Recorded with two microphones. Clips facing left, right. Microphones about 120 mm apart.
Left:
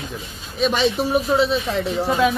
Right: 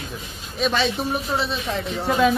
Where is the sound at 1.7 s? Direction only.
Centre (ahead or behind).